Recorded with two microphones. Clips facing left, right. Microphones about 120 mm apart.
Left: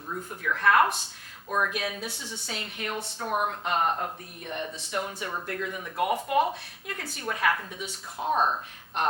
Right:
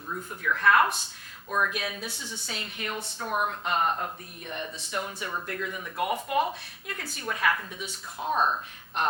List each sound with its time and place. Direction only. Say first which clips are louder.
0.1 s speech: even; 35° left (ahead or behind)
1.5 s speech: even; 35° left (ahead or behind)
1.7 s speech: left 2 dB; 50° left (ahead or behind)
3.2 s speech: left 1 dB; 35° left (ahead or behind)
4.8 s speech: left 1 dB; 55° left (ahead or behind)